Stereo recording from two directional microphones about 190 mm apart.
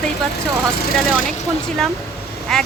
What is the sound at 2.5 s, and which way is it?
Speech, centre (ahead or behind).